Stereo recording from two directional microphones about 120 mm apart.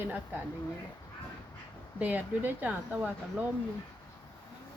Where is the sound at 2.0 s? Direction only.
15° right (ahead or behind).